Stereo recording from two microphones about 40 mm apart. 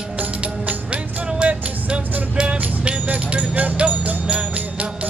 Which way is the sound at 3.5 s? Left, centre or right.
Right.